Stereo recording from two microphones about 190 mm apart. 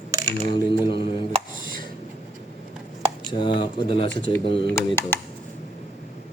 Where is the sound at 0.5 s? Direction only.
25° left (ahead or behind).